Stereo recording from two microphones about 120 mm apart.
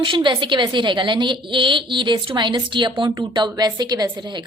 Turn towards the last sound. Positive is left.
turn(degrees=-40)  # may be behind; listen again after turning